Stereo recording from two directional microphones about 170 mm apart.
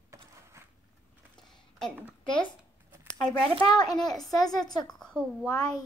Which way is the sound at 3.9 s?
Centre (ahead or behind).